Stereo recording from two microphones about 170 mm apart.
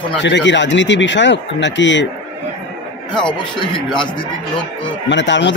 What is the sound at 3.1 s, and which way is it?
Speech, 25° left (ahead or behind).